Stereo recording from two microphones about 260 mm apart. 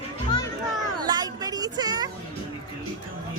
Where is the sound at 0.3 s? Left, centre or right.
Centre.